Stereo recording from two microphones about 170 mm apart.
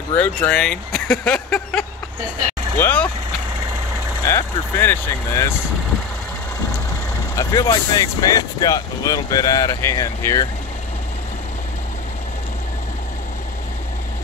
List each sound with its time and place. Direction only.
0.1 s speech: 10° left (ahead or behind)
4.3 s speech: 15° left (ahead or behind)
7.3 s speech: 20° left (ahead or behind)